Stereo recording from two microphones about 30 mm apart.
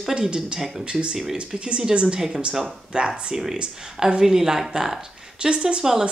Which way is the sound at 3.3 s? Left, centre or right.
Centre.